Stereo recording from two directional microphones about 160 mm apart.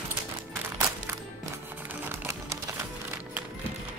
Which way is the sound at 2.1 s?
15° right (ahead or behind).